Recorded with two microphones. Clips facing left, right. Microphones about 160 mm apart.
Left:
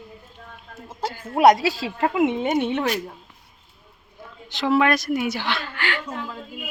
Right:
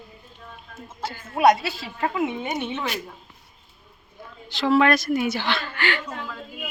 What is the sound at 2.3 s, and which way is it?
Speech, 25° left (ahead or behind).